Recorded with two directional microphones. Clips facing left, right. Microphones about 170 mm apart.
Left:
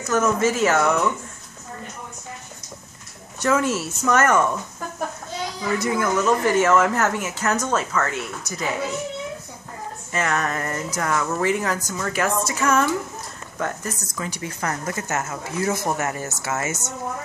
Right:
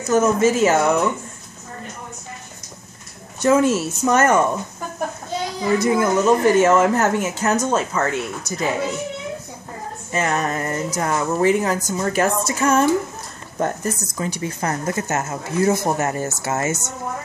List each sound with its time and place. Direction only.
0.1 s speech: 20° right (ahead or behind)
3.4 s speech: 20° right (ahead or behind)
5.6 s speech: 25° right (ahead or behind)
10.1 s speech: 25° right (ahead or behind)